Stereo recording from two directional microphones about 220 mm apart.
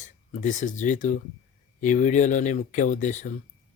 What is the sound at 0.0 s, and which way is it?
Speech, 35° left (ahead or behind).